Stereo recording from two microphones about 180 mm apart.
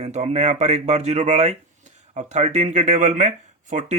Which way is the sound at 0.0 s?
35° right (ahead or behind).